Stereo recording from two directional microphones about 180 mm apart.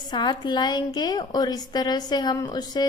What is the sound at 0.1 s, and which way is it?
A woman's voice, 25° left (ahead or behind).